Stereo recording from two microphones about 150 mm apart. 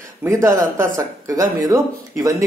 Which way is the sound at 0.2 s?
20° right (ahead or behind).